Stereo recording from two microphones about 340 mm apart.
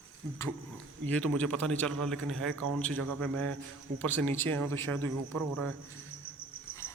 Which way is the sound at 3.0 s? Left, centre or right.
Right.